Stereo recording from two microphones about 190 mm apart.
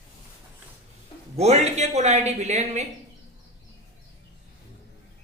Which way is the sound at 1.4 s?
35° right (ahead or behind).